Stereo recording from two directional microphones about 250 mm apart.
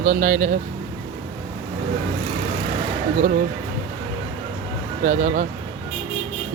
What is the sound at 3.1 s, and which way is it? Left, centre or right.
Speech, right.